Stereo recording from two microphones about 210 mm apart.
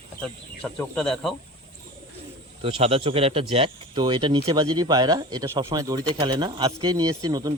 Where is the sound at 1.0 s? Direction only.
Centre (ahead or behind).